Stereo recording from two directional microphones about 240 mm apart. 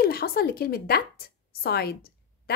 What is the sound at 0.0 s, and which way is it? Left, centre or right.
A woman's voice, left.